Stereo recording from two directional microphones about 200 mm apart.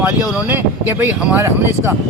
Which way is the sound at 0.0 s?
5° right (ahead or behind).